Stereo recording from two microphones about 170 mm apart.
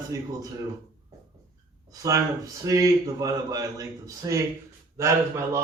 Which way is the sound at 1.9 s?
20° right (ahead or behind).